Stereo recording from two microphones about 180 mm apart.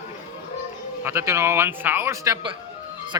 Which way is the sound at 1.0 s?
15° right (ahead or behind).